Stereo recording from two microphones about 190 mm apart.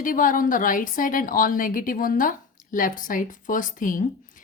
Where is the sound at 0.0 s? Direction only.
45° left (ahead or behind).